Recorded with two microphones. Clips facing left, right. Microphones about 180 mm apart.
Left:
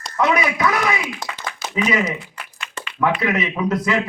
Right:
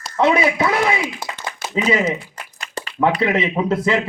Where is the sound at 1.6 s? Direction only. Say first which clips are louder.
Right 2 dB; 30° right (ahead or behind).